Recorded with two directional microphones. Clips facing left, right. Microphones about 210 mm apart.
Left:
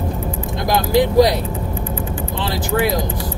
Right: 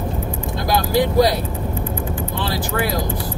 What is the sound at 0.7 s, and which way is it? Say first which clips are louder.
Speech: left 2 dB; 20° left (ahead or behind).